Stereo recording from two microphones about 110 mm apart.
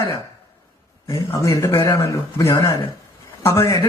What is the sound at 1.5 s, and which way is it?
Speech, 25° left (ahead or behind).